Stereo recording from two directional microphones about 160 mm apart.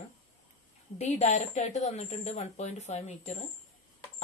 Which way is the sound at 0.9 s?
45° left (ahead or behind).